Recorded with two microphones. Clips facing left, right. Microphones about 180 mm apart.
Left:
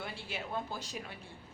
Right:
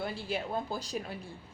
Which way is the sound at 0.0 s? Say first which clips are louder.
Right 7 dB; 35° right (ahead or behind).